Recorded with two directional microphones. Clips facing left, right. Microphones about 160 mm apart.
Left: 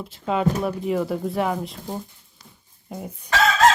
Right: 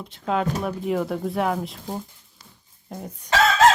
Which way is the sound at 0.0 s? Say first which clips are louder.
Left 2 dB; centre (ahead or behind).